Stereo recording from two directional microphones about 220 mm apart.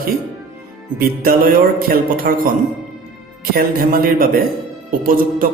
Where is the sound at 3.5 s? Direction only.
40° right (ahead or behind).